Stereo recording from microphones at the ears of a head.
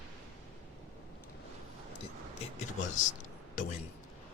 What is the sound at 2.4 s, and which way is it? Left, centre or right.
Speech, left.